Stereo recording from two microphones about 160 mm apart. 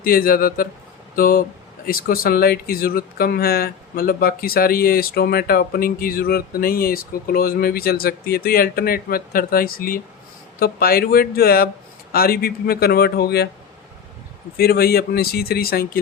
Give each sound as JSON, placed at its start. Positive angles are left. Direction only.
{"t": 0.0, "sound": "speech", "side_deg": 65}
{"t": 14.5, "sound": "speech", "side_deg": 75}